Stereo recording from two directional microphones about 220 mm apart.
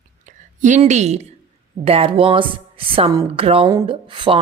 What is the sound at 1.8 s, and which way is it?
A woman's voice, 25° right (ahead or behind).